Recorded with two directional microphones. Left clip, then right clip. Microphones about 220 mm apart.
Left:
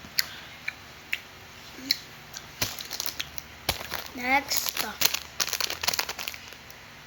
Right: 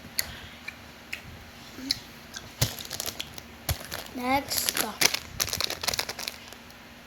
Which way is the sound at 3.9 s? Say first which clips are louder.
Left 1 dB; centre (ahead or behind).